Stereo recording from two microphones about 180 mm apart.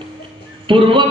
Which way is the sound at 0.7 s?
30° right (ahead or behind).